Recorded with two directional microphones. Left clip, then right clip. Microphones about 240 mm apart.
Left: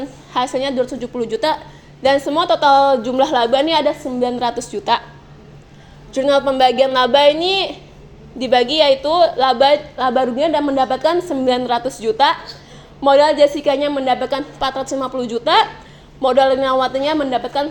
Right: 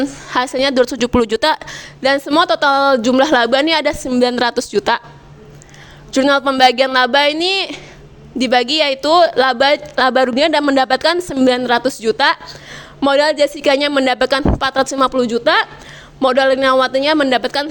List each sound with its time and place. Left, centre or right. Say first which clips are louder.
0.3 s a woman's voice: right 2 dB; right
6.1 s a woman's voice: right 2 dB; right